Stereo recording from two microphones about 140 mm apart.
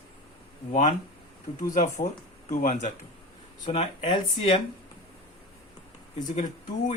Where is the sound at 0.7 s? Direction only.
60° left (ahead or behind).